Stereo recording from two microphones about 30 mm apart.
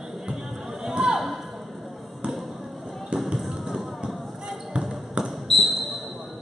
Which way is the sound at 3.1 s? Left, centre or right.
Right.